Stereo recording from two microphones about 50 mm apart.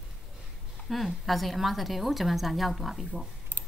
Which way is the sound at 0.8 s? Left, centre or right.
Centre.